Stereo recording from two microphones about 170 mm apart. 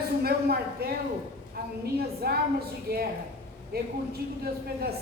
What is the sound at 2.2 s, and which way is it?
Speech, 65° right (ahead or behind).